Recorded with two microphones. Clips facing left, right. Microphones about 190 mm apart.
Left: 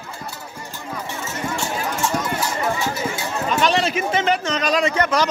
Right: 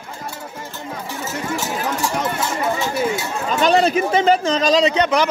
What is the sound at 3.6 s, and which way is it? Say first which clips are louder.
Speech: right 7 dB; 35° right (ahead or behind).